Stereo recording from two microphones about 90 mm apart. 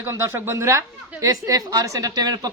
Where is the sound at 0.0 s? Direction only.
30° right (ahead or behind).